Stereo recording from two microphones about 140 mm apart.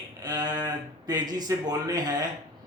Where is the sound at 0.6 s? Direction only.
30° right (ahead or behind).